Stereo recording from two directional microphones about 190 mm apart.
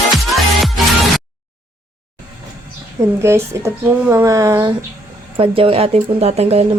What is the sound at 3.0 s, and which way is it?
Speech, 15° right (ahead or behind).